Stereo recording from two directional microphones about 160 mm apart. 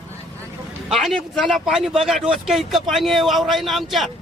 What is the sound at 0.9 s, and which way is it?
Speech, centre (ahead or behind).